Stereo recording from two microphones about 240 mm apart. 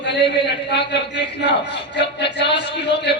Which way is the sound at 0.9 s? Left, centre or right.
Left.